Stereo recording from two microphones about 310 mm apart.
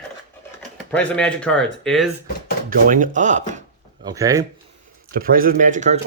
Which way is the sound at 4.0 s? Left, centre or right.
Centre.